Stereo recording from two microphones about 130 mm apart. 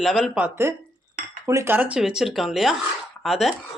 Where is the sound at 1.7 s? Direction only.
10° right (ahead or behind).